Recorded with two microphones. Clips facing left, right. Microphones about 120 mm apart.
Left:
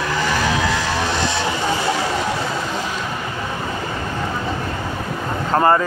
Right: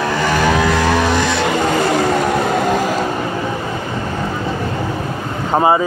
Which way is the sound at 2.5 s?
60° right (ahead or behind).